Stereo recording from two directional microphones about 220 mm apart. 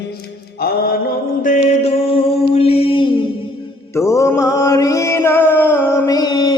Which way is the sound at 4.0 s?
15° left (ahead or behind).